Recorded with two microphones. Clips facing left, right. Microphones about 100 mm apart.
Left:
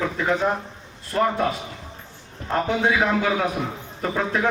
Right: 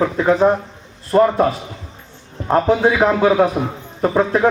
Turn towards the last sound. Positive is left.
turn(degrees=-35)  # may be behind; listen again after turning